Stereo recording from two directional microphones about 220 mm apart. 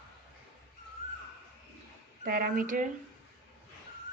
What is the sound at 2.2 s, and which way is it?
Speech, 40° right (ahead or behind).